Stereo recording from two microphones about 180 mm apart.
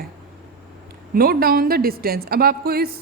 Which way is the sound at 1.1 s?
55° right (ahead or behind).